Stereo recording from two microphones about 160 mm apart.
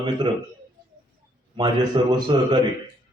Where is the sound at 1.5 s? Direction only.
30° right (ahead or behind).